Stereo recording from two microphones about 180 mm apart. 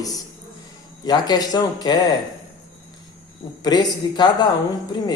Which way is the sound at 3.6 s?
25° left (ahead or behind).